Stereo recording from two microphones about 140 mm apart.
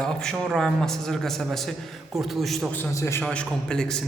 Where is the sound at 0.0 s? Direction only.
5° left (ahead or behind).